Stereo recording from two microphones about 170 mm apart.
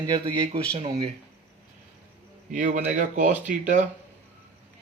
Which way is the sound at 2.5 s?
50° right (ahead or behind).